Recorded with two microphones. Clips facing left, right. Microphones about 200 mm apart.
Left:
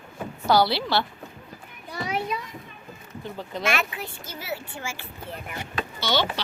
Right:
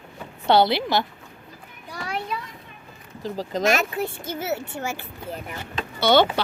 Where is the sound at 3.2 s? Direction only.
35° right (ahead or behind).